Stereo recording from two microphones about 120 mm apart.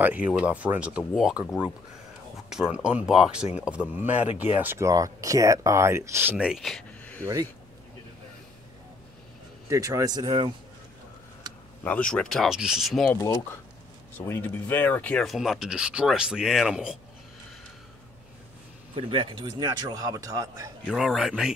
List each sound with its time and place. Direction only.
0.0 s speech: 15° right (ahead or behind)
6.3 s speech: 10° right (ahead or behind)
6.6 s a sound: 5° left (ahead or behind)
9.7 s a man's voice: 30° right (ahead or behind)
11.8 s speech: 10° left (ahead or behind)
13.2 s speech: 25° left (ahead or behind)
15.2 s speech: centre (ahead or behind)
18.9 s a man's voice: 45° right (ahead or behind); by 20.7 s 30° right (ahead or behind)
21.0 s speech: 5° right (ahead or behind)